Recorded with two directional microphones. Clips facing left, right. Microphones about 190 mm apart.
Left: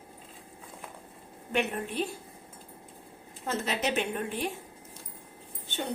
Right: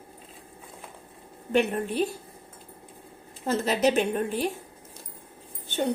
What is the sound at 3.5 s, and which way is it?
A woman's voice, 40° right (ahead or behind).